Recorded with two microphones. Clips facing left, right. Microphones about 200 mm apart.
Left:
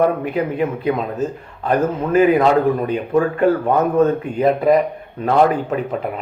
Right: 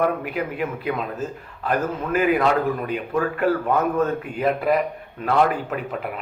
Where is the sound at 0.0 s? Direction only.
35° left (ahead or behind).